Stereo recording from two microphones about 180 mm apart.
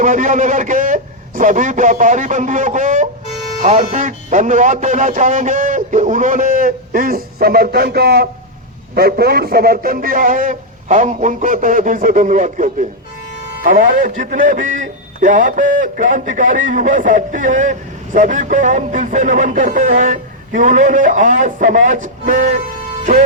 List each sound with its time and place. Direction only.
0.0 s a man's voice: 45° right (ahead or behind)